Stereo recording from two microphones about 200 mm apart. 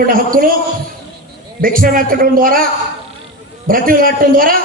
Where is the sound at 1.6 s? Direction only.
45° right (ahead or behind).